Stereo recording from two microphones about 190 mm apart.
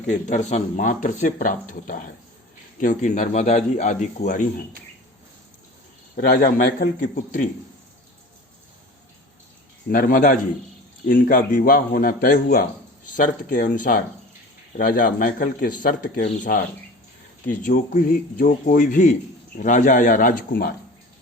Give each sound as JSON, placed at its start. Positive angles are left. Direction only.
{"t": 0.1, "sound": "speech", "side_deg": 40}
{"t": 6.1, "sound": "speech", "side_deg": 50}
{"t": 9.9, "sound": "speech", "side_deg": 45}